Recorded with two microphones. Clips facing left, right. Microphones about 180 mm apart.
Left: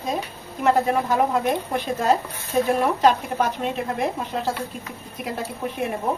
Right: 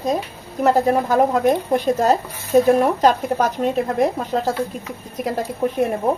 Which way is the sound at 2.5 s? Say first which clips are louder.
Right 6 dB; 40° right (ahead or behind).